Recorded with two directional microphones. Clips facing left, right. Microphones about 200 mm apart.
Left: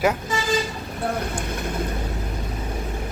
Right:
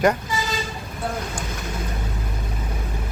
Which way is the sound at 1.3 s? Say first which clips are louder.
Left 3 dB; 55° left (ahead or behind).